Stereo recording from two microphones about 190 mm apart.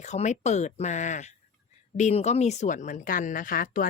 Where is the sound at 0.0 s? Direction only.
40° left (ahead or behind).